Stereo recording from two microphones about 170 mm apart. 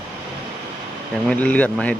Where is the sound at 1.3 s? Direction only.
10° left (ahead or behind).